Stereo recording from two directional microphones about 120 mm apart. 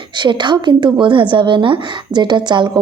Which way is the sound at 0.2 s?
40° right (ahead or behind).